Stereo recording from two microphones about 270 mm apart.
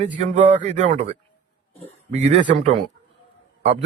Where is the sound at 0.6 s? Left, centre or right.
Right.